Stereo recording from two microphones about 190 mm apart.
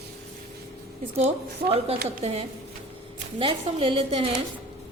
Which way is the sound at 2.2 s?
35° right (ahead or behind).